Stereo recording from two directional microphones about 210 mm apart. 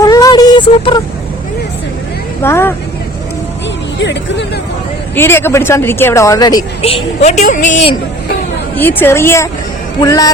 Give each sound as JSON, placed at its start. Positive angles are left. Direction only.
{"t": 0.0, "sound": "a sound", "side_deg": 15}
{"t": 2.4, "sound": "speech", "side_deg": 10}
{"t": 3.9, "sound": "speech", "side_deg": 55}
{"t": 5.1, "sound": "speech", "side_deg": 10}
{"t": 8.7, "sound": "speech", "side_deg": 10}